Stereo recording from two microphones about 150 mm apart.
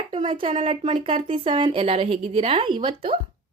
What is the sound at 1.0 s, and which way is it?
A woman's voice, 35° right (ahead or behind).